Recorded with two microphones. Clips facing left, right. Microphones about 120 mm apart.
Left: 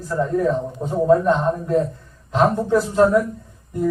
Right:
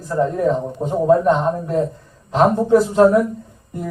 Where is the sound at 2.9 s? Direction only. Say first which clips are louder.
Even; 20° right (ahead or behind).